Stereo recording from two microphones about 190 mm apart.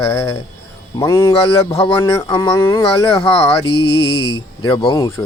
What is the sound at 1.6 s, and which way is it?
Speech, 25° left (ahead or behind).